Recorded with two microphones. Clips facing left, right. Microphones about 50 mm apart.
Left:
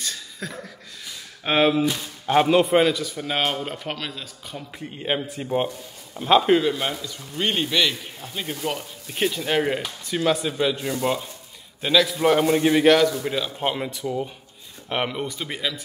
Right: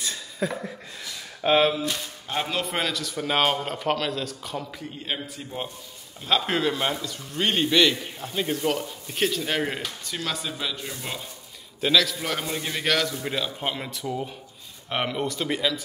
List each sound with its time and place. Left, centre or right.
0.0 s a sound: centre
1.4 s speech: centre
2.2 s a man's voice: left
2.6 s speech: centre
3.2 s a man's voice: centre
4.7 s a man's voice: left
6.4 s a man's voice: centre
10.0 s a man's voice: centre
12.1 s a man's voice: left
12.7 s speech: centre
13.2 s a man's voice: centre
13.6 s a man's voice: centre